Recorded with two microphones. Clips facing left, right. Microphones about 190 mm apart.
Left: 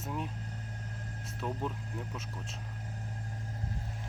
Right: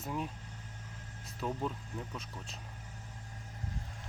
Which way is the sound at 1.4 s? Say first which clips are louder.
Even; 5° left (ahead or behind).